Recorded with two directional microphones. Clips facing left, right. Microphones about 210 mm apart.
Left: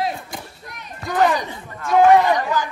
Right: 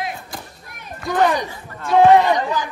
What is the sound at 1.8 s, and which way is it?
Speech, 30° right (ahead or behind).